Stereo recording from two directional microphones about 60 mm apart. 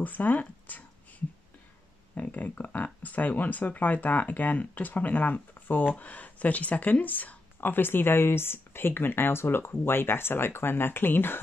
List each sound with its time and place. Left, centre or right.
0.0 s speech: left
2.1 s speech: left